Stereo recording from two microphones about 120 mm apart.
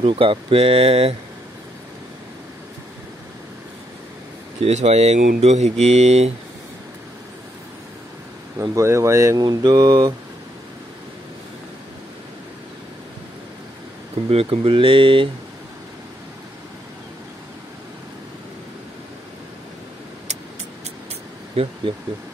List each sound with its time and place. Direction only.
0.0 s speech: 50° right (ahead or behind)
4.6 s speech: 65° right (ahead or behind)
8.7 s speech: 25° right (ahead or behind)
14.3 s speech: 55° right (ahead or behind)